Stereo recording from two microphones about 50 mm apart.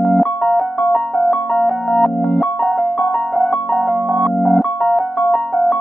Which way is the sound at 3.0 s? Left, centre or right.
Centre.